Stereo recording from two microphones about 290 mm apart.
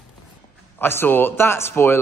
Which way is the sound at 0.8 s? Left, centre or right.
Centre.